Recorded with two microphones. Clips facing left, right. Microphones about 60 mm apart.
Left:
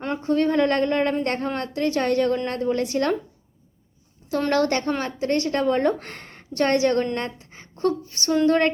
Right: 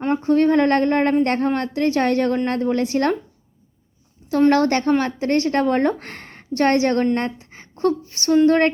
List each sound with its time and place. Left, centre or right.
0.1 s a woman's voice: right
4.3 s a woman's voice: right